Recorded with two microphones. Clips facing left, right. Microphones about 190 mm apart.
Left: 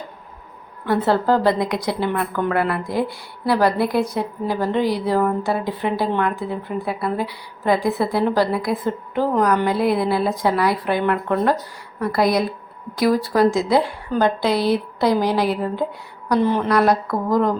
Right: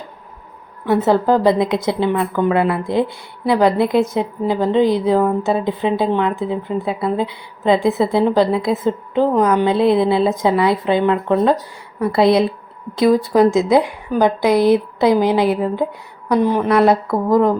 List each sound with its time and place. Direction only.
0.9 s a woman's voice: 20° right (ahead or behind)